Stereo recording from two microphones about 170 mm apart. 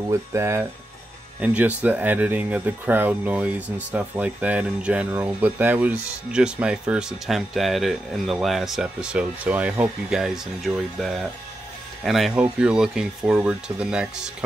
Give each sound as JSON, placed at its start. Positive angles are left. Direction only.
{"t": 0.1, "sound": "speech", "side_deg": -15}